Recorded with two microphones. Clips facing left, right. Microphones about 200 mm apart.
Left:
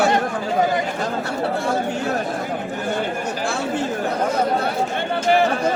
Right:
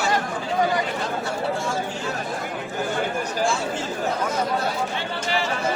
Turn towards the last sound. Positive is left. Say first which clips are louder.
# left 9 dB
turn(degrees=55)  # may be behind; listen again after turning